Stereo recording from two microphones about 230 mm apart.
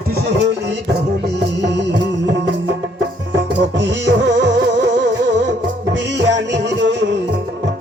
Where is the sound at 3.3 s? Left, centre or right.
Right.